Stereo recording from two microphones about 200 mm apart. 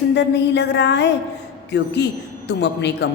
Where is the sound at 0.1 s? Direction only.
60° left (ahead or behind).